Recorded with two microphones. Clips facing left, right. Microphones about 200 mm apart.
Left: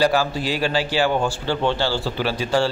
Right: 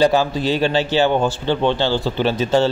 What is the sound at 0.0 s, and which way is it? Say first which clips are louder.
A man's voice: right 4 dB; 20° right (ahead or behind).